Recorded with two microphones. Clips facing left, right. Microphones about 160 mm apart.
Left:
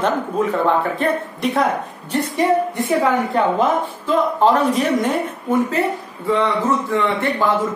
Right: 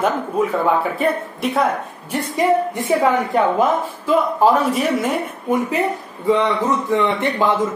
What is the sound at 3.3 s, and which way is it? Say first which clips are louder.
Speech: right 1 dB; 10° right (ahead or behind).